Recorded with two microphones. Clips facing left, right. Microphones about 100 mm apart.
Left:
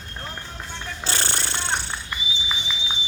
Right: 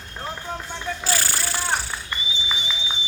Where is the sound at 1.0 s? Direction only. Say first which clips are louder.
Even; 30° left (ahead or behind).